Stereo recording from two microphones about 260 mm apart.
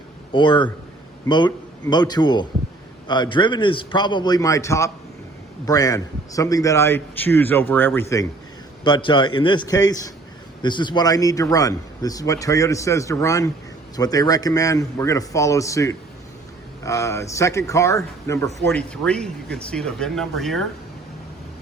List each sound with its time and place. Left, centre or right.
0.3 s speech: centre